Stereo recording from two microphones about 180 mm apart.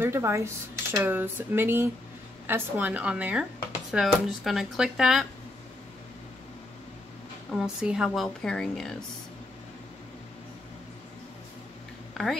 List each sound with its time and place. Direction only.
0.0 s a woman's voice: 15° right (ahead or behind)
7.5 s a woman's voice: 5° right (ahead or behind)
12.1 s a sound: centre (ahead or behind)